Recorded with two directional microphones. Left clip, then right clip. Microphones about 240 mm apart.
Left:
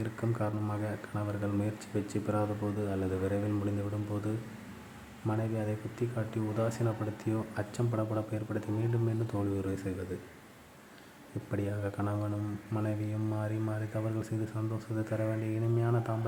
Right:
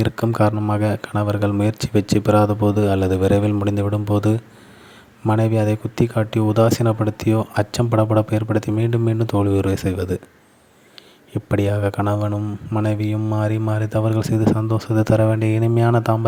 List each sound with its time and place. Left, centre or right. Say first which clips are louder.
0.0 s speech: right 16 dB; right
11.5 s speech: right 16 dB; right